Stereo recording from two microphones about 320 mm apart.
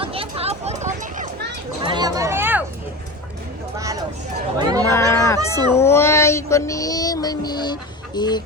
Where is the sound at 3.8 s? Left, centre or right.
Centre.